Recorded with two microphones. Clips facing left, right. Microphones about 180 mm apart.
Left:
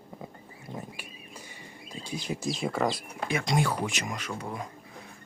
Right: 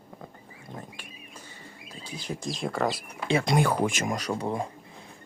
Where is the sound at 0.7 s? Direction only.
10° left (ahead or behind).